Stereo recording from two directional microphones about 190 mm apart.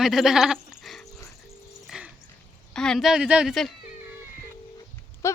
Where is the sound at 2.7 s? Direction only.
5° left (ahead or behind).